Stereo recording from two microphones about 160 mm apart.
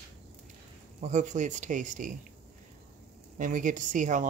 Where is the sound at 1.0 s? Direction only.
50° right (ahead or behind).